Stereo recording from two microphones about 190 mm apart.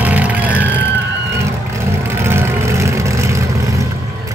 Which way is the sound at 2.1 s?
15° right (ahead or behind).